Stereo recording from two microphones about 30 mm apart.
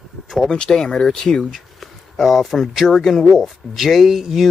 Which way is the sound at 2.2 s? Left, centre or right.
Centre.